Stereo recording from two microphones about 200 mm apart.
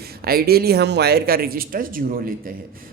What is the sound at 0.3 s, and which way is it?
Speech, 50° right (ahead or behind).